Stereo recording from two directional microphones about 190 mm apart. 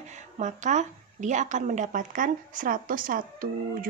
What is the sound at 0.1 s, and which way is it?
A woman's voice, 40° right (ahead or behind).